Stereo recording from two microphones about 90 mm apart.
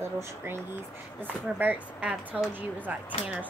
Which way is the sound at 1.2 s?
20° right (ahead or behind).